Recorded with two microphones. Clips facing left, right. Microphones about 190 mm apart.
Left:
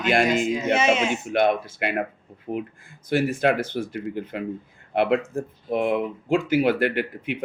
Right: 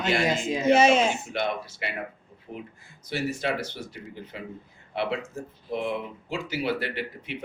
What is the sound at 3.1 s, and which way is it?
Speech, 55° left (ahead or behind).